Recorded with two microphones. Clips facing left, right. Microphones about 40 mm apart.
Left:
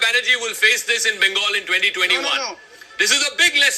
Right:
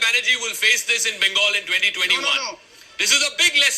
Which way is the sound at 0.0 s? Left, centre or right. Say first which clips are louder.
Left 2 dB; left.